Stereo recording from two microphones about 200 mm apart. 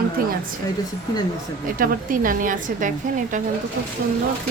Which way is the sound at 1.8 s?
45° right (ahead or behind).